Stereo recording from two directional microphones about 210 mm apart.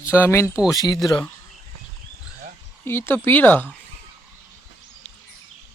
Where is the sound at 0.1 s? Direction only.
10° left (ahead or behind).